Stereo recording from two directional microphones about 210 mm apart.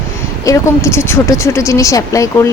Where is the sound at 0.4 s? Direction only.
15° left (ahead or behind).